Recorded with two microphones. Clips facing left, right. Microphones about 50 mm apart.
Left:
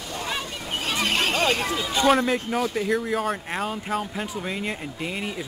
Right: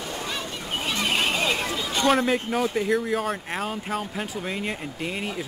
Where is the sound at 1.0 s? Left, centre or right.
Centre.